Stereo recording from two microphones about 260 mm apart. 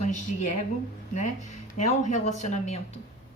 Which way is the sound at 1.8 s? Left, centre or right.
Left.